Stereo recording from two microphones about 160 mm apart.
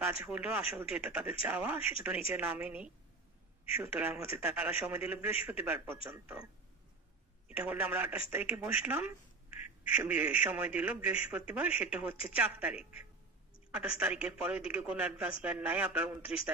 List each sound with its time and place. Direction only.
0.0 s a man's voice: 10° right (ahead or behind)
7.4 s a man's voice: 10° right (ahead or behind)